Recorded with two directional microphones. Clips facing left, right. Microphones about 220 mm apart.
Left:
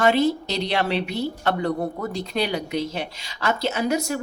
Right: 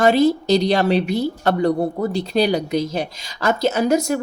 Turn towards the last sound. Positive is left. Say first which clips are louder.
# right 6 dB
turn(degrees=-45)  # may be behind; listen again after turning